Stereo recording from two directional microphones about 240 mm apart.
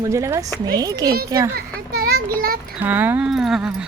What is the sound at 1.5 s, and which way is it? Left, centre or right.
A child's voice, right.